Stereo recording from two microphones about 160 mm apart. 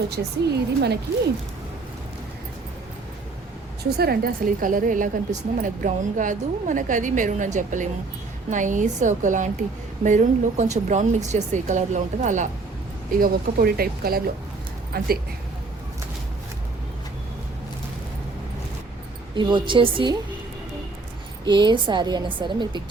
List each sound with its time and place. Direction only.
0.2 s speech: 90° right
3.9 s a woman's voice: 75° right (ahead or behind); by 12.5 s 50° right (ahead or behind)
13.1 s speech: 65° right (ahead or behind)
19.3 s a woman's voice: 30° right (ahead or behind)
21.4 s a woman's voice: 25° right (ahead or behind)